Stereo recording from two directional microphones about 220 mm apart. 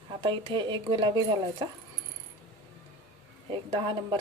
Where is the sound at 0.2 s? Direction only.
25° right (ahead or behind).